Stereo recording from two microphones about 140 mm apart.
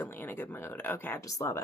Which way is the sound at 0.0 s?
15° left (ahead or behind).